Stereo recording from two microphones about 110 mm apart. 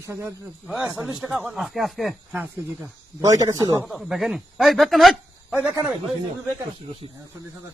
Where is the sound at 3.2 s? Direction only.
30° right (ahead or behind).